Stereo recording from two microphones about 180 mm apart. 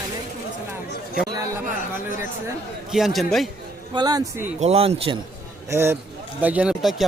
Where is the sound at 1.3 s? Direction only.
15° right (ahead or behind).